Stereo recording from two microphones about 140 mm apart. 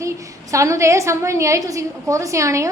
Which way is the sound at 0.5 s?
20° right (ahead or behind).